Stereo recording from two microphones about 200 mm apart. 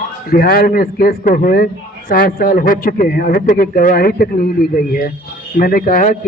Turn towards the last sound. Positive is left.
turn(degrees=40)  # may be behind; listen again after turning